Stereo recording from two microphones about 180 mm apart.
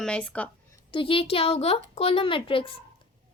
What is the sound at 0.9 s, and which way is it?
A woman's voice, 30° left (ahead or behind).